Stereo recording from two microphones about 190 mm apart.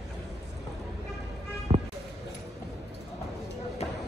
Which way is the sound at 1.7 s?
25° right (ahead or behind).